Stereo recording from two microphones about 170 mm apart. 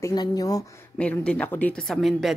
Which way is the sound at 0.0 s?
25° left (ahead or behind).